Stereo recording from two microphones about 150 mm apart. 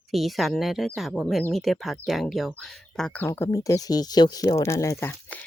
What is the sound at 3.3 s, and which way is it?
Speech, 20° left (ahead or behind).